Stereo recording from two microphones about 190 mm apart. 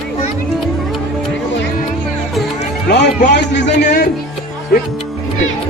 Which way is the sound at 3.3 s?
65° left (ahead or behind).